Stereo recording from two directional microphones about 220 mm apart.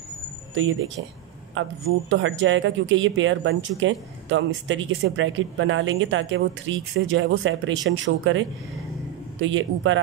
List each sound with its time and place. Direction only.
1.5 s speech: 60° right (ahead or behind)